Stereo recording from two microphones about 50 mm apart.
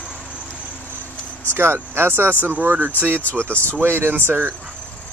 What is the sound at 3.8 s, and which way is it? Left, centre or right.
Speech, right.